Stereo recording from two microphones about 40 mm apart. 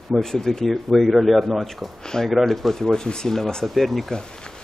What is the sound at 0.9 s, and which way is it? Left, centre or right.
A man's voice, centre.